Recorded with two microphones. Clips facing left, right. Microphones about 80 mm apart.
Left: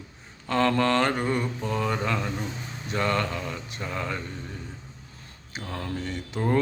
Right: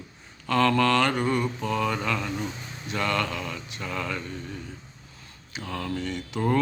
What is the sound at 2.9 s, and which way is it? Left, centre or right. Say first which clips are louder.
Speech: left 1 dB; left.